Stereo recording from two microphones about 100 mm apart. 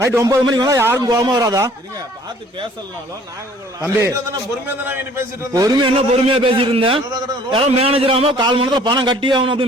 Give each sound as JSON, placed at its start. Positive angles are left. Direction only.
{"t": 0.0, "sound": "a man's voice", "side_deg": -30}
{"t": 0.4, "sound": "a man's voice", "side_deg": -45}
{"t": 0.8, "sound": "a man's voice", "side_deg": -25}
{"t": 1.0, "sound": "a man's voice", "side_deg": -40}
{"t": 3.8, "sound": "a man's voice", "side_deg": -30}
{"t": 4.7, "sound": "a man's voice", "side_deg": -20}
{"t": 5.5, "sound": "a man's voice", "side_deg": -40}
{"t": 6.2, "sound": "a man's voice", "side_deg": -65}
{"t": 8.4, "sound": "a man's voice", "side_deg": -50}